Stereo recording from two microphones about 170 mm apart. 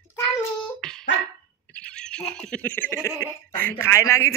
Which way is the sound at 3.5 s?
10° left (ahead or behind).